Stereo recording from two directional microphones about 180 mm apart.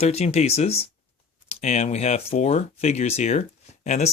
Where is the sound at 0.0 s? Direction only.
35° left (ahead or behind).